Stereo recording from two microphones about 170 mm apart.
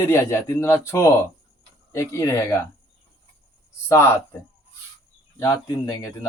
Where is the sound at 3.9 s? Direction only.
15° left (ahead or behind).